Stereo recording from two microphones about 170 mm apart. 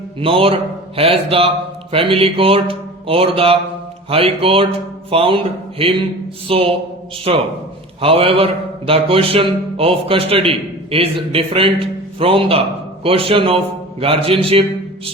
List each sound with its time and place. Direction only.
0.2 s a man's voice: 30° right (ahead or behind)